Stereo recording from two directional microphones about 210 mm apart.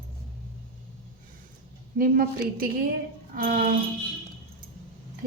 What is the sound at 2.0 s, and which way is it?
A woman's voice, 45° right (ahead or behind).